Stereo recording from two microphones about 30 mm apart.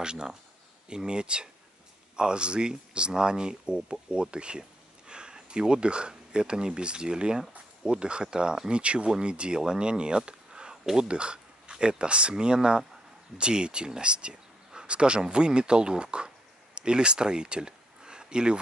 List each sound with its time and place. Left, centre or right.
0.0 s speech: right
11.1 s speech: right